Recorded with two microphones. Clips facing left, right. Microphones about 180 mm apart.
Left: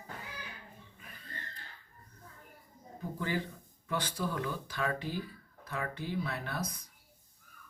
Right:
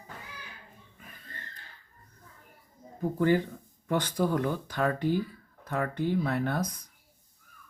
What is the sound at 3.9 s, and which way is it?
Speech, 50° right (ahead or behind).